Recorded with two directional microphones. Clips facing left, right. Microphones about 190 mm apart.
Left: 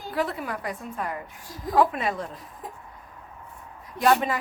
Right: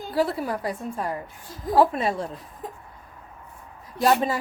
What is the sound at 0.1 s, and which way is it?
A woman's voice, 30° right (ahead or behind).